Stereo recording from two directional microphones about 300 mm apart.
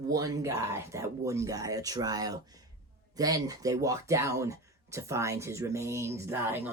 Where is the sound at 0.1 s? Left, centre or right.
Centre.